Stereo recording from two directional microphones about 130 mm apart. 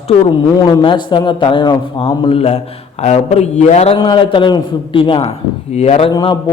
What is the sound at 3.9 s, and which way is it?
A man's voice, 35° left (ahead or behind).